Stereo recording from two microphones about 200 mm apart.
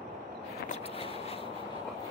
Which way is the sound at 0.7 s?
30° left (ahead or behind).